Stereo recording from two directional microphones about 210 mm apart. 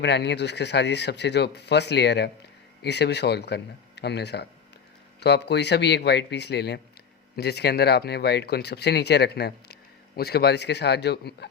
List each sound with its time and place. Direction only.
0.0 s speech: 55° left (ahead or behind)